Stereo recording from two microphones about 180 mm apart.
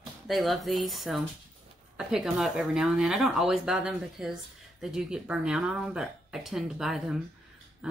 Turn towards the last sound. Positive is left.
turn(degrees=-5)  # may be behind; listen again after turning